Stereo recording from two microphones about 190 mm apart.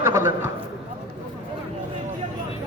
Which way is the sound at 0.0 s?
15° right (ahead or behind).